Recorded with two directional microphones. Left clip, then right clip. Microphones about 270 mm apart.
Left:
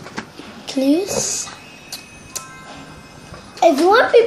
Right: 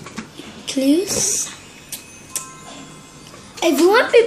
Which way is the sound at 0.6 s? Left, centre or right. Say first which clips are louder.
Even; centre.